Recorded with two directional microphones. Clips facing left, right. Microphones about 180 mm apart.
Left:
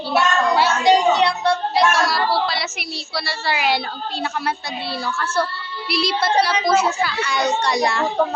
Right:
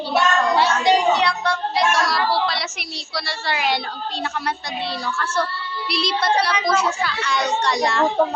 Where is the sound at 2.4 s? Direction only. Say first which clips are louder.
Left 1 dB; 5° left (ahead or behind).